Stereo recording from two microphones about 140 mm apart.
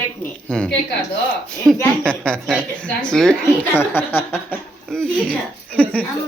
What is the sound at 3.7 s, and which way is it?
Speech, 15° left (ahead or behind).